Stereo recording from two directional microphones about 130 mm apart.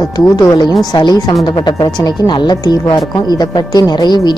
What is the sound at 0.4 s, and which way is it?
Speech, 25° left (ahead or behind).